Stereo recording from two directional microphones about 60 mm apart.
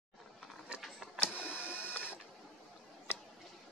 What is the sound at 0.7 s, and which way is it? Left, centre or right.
Printer, centre.